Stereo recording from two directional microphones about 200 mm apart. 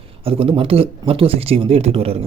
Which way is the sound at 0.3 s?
30° right (ahead or behind).